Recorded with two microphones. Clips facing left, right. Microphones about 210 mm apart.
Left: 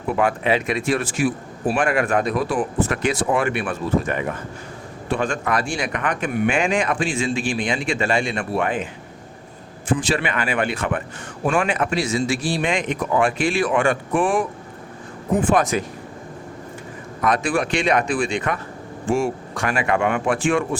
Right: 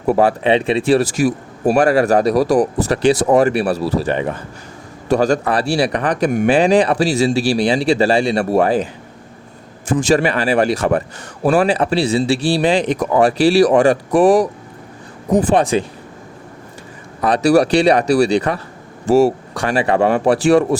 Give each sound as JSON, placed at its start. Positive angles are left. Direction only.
{"t": 0.0, "sound": "a man's voice", "side_deg": -35}
{"t": 9.9, "sound": "a man's voice", "side_deg": -45}
{"t": 17.2, "sound": "a man's voice", "side_deg": -35}